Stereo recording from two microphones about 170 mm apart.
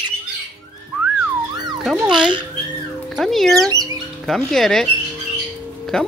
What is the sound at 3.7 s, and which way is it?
Bird, 20° right (ahead or behind).